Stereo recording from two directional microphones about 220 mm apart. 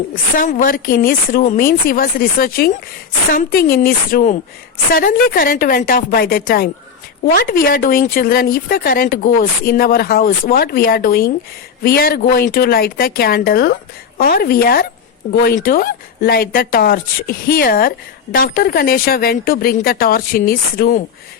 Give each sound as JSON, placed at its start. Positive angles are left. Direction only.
{"t": 0.1, "sound": "speech", "side_deg": 40}